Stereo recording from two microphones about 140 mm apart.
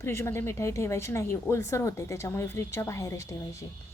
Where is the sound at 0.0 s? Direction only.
20° left (ahead or behind).